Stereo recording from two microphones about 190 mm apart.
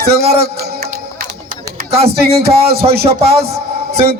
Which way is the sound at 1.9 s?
30° right (ahead or behind).